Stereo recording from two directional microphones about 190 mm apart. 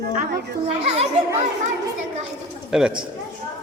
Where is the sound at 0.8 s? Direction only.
35° right (ahead or behind).